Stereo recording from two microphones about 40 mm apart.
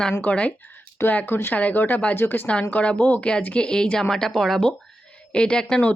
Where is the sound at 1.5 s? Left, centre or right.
Left.